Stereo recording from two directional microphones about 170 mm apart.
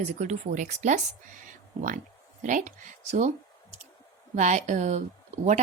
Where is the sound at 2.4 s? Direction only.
50° right (ahead or behind).